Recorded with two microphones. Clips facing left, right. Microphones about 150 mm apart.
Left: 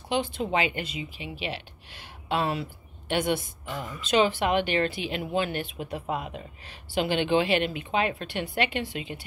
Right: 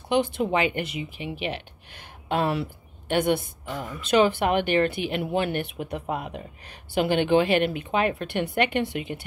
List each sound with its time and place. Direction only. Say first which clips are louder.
0.1 s a woman's voice: right 4 dB; 55° right (ahead or behind)